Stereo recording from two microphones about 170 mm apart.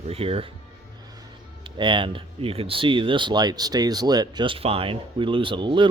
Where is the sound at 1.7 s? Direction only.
30° right (ahead or behind).